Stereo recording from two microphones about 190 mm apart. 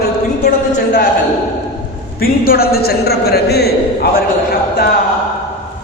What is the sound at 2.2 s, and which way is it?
A man's voice, 50° left (ahead or behind).